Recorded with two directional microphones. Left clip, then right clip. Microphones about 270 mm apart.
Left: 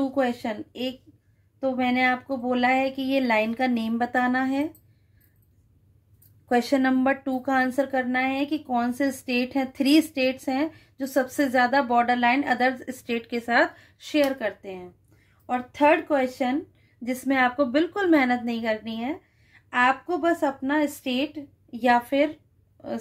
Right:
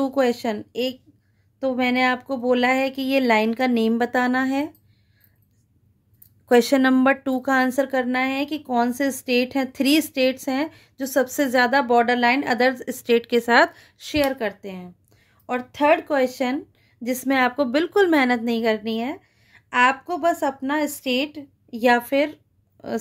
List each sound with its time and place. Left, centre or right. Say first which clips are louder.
0.0 s speech: right 4 dB; right
6.5 s speech: right 5 dB; right